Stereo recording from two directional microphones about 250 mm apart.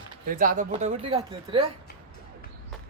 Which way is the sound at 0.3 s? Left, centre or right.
Right.